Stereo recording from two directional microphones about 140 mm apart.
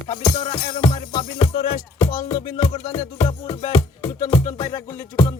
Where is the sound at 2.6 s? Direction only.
50° left (ahead or behind).